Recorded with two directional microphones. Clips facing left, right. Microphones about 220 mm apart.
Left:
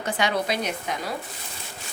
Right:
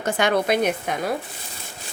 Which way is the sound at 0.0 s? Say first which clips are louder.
Right 4 dB; 50° right (ahead or behind).